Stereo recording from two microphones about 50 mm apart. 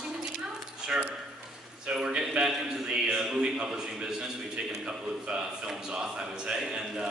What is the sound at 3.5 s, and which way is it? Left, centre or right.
A man's voice, centre.